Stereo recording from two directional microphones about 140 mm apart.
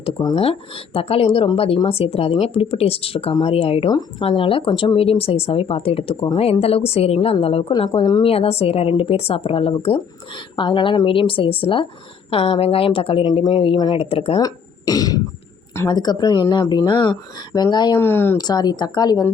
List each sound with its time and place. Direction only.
0.9 s speech: 45° left (ahead or behind)
7.7 s a woman's voice: 35° left (ahead or behind)
14.0 s speech: 45° left (ahead or behind)
14.3 s a woman's voice: 25° left (ahead or behind)
18.0 s speech: 15° left (ahead or behind)
18.3 s speech: 30° left (ahead or behind)